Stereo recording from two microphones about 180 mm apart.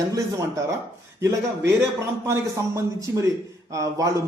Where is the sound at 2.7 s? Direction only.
15° right (ahead or behind).